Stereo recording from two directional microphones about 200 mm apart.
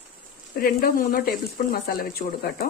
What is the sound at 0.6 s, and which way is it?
Speech, 45° left (ahead or behind).